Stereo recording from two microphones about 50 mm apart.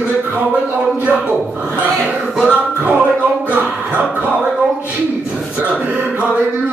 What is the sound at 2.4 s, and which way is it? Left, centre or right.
Music, centre.